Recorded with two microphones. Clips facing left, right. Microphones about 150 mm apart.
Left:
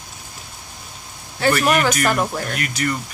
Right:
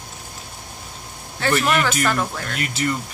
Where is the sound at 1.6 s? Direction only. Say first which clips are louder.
Left 2 dB; 15° left (ahead or behind).